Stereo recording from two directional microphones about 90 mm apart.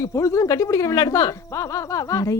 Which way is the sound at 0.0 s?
35° left (ahead or behind).